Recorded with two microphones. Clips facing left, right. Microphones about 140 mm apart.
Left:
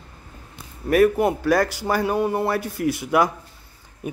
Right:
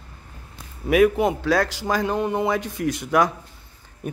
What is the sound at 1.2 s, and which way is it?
Speech, 10° left (ahead or behind).